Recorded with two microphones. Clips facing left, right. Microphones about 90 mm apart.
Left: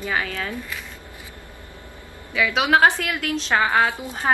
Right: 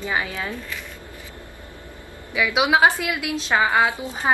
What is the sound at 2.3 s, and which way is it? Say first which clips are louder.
Speech: even; 15° right (ahead or behind).